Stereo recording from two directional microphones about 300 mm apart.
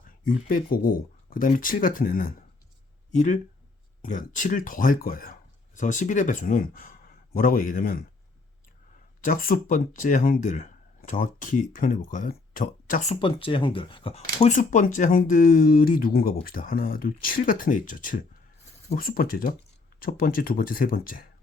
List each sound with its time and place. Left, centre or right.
0.3 s speech: left
9.2 s speech: left
13.1 s speech: centre